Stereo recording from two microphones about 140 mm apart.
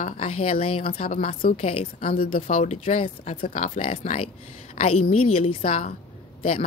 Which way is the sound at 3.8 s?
45° left (ahead or behind).